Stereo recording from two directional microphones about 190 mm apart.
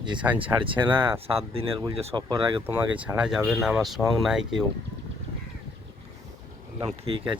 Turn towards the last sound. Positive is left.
turn(degrees=-30)  # may be behind; listen again after turning